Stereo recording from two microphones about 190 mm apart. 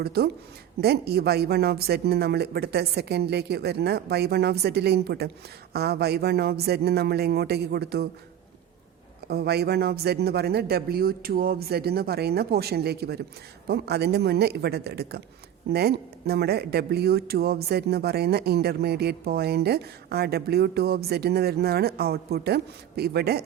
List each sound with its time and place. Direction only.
0.0 s speech: 55° right (ahead or behind)
9.2 s speech: 55° right (ahead or behind)